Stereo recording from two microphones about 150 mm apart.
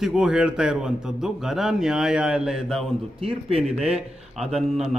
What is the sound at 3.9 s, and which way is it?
Speech, 45° right (ahead or behind).